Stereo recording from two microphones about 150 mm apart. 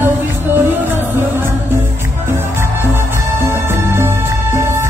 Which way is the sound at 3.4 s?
15° right (ahead or behind).